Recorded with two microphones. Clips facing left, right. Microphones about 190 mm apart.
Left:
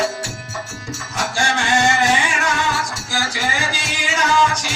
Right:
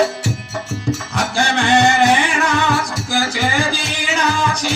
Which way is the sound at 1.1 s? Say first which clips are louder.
Even; 60° right (ahead or behind).